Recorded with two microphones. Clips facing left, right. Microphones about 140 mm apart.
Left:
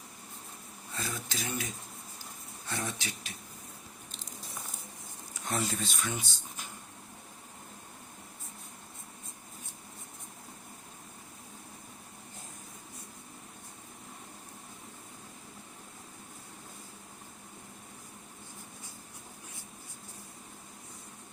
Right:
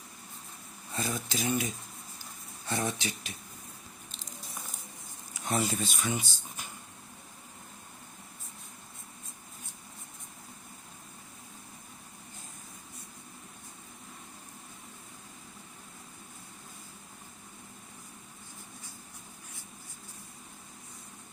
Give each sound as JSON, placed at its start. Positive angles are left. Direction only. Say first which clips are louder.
{"t": 0.9, "sound": "speech", "louder": "right 5 dB", "side_deg": -15}
{"t": 2.6, "sound": "speech", "louder": "right 5 dB", "side_deg": -20}
{"t": 5.3, "sound": "speech", "louder": "right 3 dB", "side_deg": -5}